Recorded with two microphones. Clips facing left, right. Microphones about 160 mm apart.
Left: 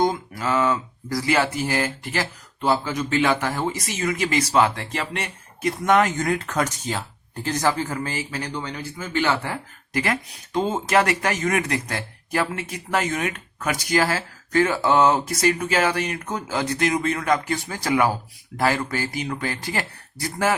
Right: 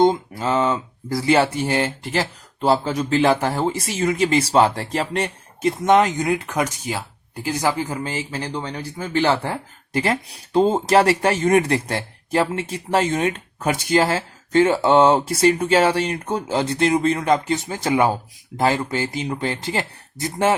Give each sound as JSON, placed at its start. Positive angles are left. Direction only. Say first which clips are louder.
{"t": 0.0, "sound": "speech", "louder": "right 5 dB", "side_deg": -25}
{"t": 5.8, "sound": "speech", "louder": "right 3 dB", "side_deg": -20}